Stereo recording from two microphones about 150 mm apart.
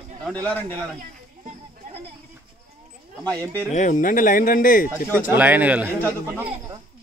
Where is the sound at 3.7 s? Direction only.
60° left (ahead or behind).